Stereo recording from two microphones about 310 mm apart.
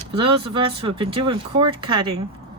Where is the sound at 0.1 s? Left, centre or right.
Centre.